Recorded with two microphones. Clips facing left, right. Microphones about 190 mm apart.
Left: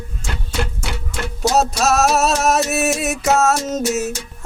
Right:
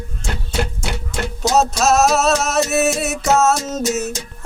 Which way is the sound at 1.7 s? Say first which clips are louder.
Right 1 dB; 10° left (ahead or behind).